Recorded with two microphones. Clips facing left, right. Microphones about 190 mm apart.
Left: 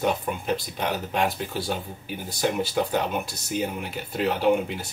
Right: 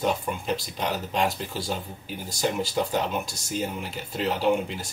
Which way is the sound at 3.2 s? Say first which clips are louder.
Left 2 dB; 60° left (ahead or behind).